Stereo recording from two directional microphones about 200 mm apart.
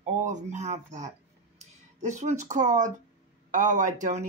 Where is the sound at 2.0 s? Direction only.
35° right (ahead or behind).